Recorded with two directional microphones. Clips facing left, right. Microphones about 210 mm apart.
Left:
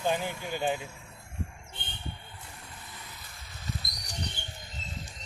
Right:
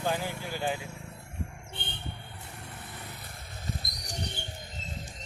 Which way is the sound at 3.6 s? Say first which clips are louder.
Right 1 dB; 55° right (ahead or behind).